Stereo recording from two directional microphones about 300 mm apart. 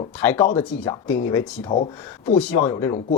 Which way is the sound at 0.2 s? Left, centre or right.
Centre.